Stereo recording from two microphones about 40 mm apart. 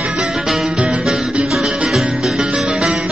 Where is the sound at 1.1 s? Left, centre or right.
Centre.